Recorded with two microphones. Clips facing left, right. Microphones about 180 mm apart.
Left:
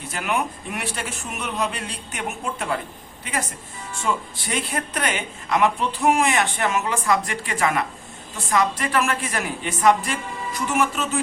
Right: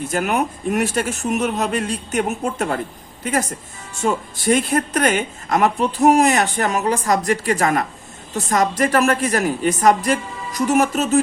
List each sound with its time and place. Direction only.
0.1 s speech: 45° right (ahead or behind)
4.0 s speech: 45° right (ahead or behind)